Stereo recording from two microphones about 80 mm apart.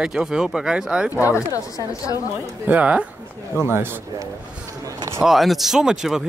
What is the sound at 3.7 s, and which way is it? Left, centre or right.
Speech, right.